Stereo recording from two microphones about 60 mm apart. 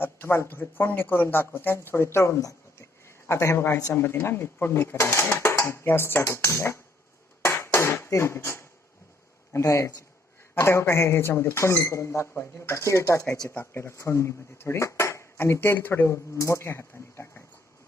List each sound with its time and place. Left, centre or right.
0.0 s speech: left
7.4 s a sound: left
7.9 s speech: left
9.5 s speech: left
10.5 s speech: left
12.3 s speech: left
12.7 s speech: left
16.0 s speech: left